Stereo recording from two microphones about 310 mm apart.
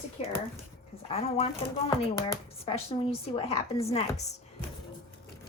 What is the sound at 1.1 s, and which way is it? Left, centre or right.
Speech, centre.